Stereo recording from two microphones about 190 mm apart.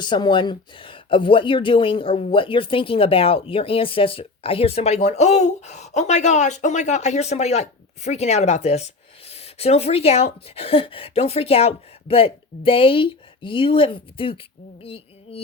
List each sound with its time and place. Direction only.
0.0 s speech: 25° left (ahead or behind)